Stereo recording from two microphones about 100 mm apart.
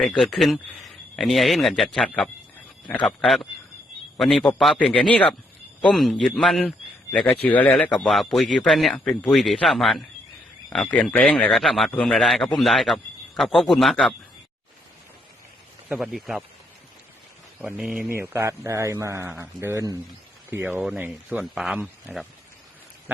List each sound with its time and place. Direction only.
0.0 s speech: 5° left (ahead or behind)
2.0 s speech: 15° left (ahead or behind)
3.1 s speech: centre (ahead or behind)
5.9 s speech: centre (ahead or behind)
7.1 s speech: 15° left (ahead or behind)
7.9 s speech: 5° left (ahead or behind)
11.1 s speech: 10° left (ahead or behind)
15.9 s speech: 5° right (ahead or behind)
17.6 s speech: 10° right (ahead or behind)
18.1 s a man's voice: 25° right (ahead or behind)
20.5 s a man's voice: 20° right (ahead or behind)
21.5 s speech: 5° right (ahead or behind)